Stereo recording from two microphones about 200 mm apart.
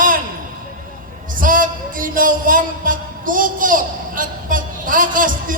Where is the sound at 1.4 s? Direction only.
40° right (ahead or behind).